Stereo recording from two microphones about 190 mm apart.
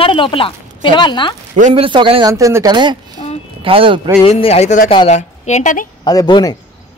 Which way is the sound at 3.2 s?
30° left (ahead or behind).